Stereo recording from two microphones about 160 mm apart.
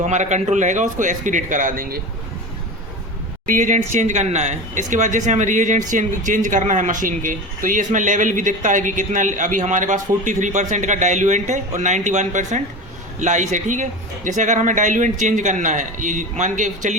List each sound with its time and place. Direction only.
0.0 s speech: 50° right (ahead or behind)
3.4 s speech: 55° right (ahead or behind)